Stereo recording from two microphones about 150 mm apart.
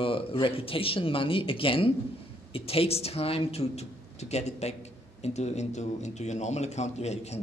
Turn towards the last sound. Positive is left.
turn(degrees=45)  # may be behind; listen again after turning